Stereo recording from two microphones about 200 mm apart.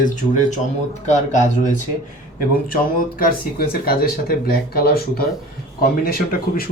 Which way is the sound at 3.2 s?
45° left (ahead or behind).